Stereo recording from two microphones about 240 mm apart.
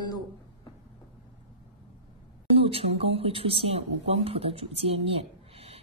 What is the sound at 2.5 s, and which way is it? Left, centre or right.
A woman's voice, right.